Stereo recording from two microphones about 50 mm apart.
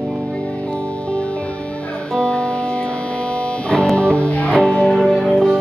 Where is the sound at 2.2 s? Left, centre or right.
Left.